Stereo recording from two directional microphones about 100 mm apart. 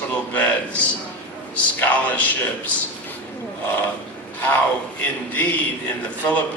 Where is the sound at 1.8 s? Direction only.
15° left (ahead or behind).